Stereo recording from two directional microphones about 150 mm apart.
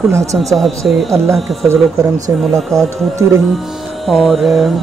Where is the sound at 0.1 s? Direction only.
20° right (ahead or behind).